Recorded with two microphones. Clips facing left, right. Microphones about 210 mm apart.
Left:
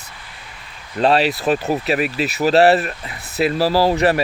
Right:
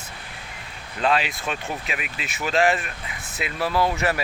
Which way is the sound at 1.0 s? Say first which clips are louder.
Left 7 dB; 35° left (ahead or behind).